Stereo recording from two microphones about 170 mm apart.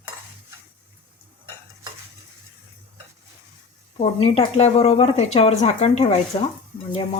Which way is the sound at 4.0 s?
35° left (ahead or behind).